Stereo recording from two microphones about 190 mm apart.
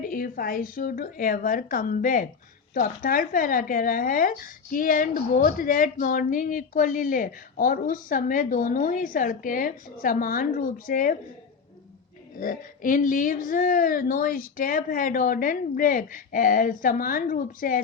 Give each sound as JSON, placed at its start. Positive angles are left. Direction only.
{"t": 0.0, "sound": "speech", "side_deg": 50}
{"t": 12.4, "sound": "speech", "side_deg": 45}